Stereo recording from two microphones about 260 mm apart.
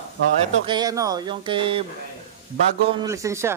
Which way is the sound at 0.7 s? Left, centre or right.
Centre.